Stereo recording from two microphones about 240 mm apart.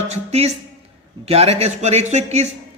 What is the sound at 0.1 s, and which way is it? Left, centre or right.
A woman's voice, right.